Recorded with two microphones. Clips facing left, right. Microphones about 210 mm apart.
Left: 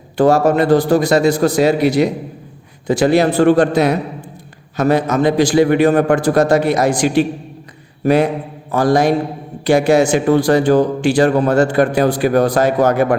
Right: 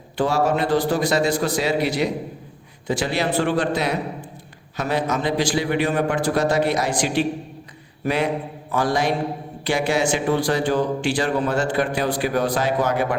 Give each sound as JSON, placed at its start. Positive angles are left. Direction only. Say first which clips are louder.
{"t": 0.2, "sound": "a man's voice", "louder": "left 8 dB", "side_deg": 45}
{"t": 8.0, "sound": "mantra", "louder": "left 9 dB", "side_deg": 40}
{"t": 8.7, "sound": "a man's voice", "louder": "left 8 dB", "side_deg": 40}